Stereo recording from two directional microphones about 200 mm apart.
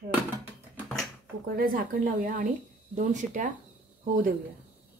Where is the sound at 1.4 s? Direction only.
45° right (ahead or behind).